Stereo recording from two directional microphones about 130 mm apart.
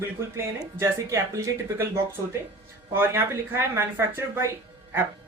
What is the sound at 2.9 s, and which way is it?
Speech, 20° right (ahead or behind).